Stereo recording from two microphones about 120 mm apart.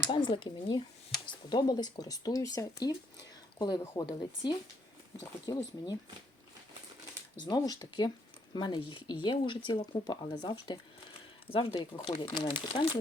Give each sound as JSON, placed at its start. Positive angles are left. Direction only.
{"t": 0.0, "sound": "speech", "side_deg": 40}
{"t": 3.6, "sound": "speech", "side_deg": 35}
{"t": 7.3, "sound": "speech", "side_deg": 35}
{"t": 11.4, "sound": "speech", "side_deg": 50}